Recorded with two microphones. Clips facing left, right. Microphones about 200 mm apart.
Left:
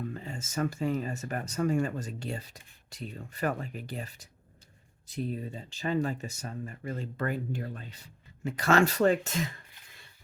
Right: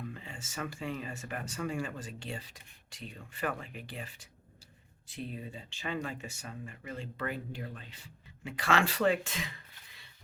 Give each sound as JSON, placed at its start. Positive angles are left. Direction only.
{"t": 0.1, "sound": "speech", "side_deg": 40}